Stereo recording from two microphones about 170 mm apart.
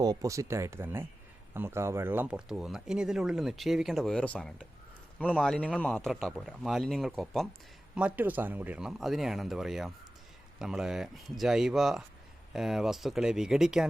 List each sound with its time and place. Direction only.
0.0 s speech: 20° right (ahead or behind); by 13.8 s 5° right (ahead or behind)